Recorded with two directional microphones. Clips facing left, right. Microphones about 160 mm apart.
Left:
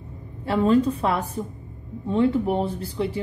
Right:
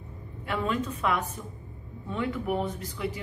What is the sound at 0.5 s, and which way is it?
A woman's voice, 35° left (ahead or behind).